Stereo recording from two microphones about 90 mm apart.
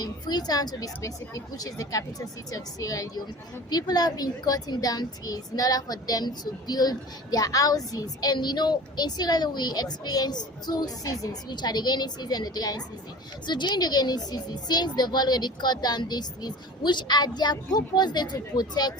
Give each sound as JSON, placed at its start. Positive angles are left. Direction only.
{"t": 0.0, "sound": "a woman's voice", "side_deg": 50}